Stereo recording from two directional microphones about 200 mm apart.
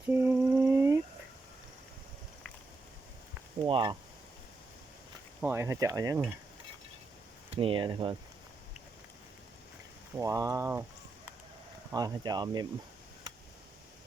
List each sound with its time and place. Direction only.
0.1 s lullaby: 10° right (ahead or behind)
3.7 s speech: 25° right (ahead or behind)
5.4 s speech: 10° right (ahead or behind)
7.5 s speech: 25° right (ahead or behind)
10.2 s speech: 15° right (ahead or behind)
11.9 s speech: 20° right (ahead or behind)